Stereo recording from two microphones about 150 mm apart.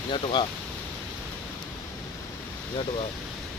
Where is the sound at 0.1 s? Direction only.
30° left (ahead or behind).